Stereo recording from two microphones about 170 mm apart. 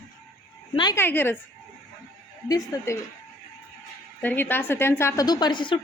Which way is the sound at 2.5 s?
20° left (ahead or behind).